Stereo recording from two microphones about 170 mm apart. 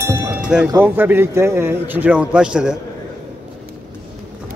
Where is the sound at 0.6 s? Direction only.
10° right (ahead or behind).